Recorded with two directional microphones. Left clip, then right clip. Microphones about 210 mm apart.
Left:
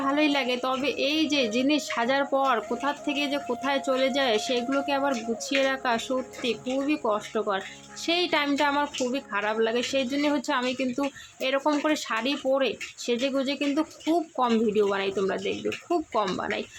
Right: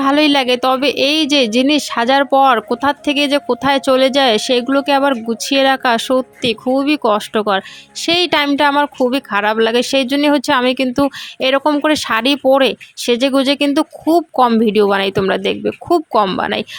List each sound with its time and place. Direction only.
0.0 s speech: 45° right (ahead or behind)